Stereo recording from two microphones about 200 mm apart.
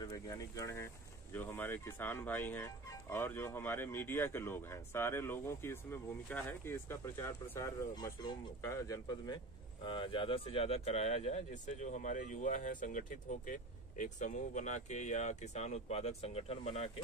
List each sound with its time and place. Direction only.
0.0 s speech: 20° left (ahead or behind)